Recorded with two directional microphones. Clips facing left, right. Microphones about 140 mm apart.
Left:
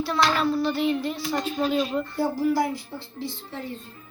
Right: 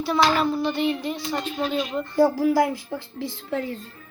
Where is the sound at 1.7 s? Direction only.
5° left (ahead or behind).